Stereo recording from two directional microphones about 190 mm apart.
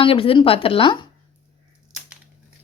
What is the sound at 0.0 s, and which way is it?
Speech, 30° left (ahead or behind).